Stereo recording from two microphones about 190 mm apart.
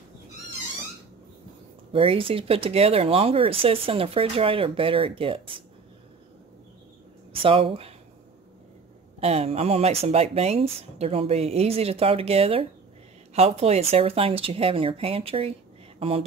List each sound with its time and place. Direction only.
1.9 s speech: 30° right (ahead or behind)
7.4 s speech: 30° right (ahead or behind)
9.2 s speech: 35° right (ahead or behind)